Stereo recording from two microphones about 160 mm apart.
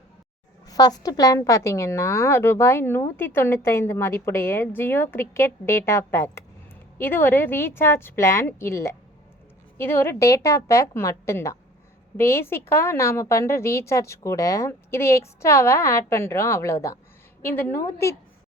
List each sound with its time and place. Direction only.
0.7 s a woman's voice: 25° left (ahead or behind)